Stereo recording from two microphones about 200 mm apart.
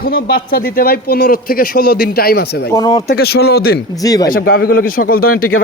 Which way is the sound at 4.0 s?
20° left (ahead or behind).